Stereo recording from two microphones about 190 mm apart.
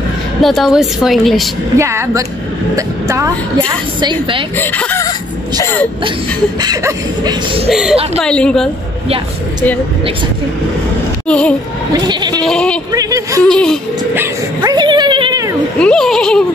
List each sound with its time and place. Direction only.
0.4 s a woman's voice: centre (ahead or behind)
1.8 s speech: 15° right (ahead or behind)
4.0 s a sound: 25° right (ahead or behind)
4.6 s speech: 10° left (ahead or behind)
6.6 s a sound: 20° right (ahead or behind)
7.7 s a woman's voice: 5° right (ahead or behind)
11.2 s a woman's voice: 5° left (ahead or behind)
11.9 s a sound: 20° right (ahead or behind)
12.4 s a woman's voice: 5° left (ahead or behind)
12.9 s speech: 20° right (ahead or behind)
13.4 s a woman's voice: 5° left (ahead or behind)
14.1 s speech: 15° right (ahead or behind)
15.8 s a woman's voice: 5° left (ahead or behind)